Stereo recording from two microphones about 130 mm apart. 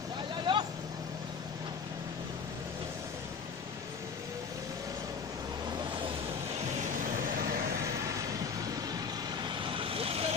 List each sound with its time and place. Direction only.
0.5 s vehicle: 30° right (ahead or behind)
9.6 s vehicle: 45° right (ahead or behind)